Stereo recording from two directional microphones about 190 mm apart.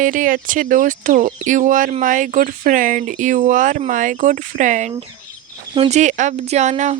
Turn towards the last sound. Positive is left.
turn(degrees=-40)  # may be behind; listen again after turning